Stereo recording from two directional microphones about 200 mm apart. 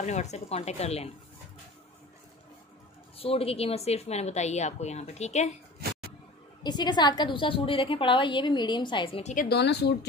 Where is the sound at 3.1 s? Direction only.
30° left (ahead or behind).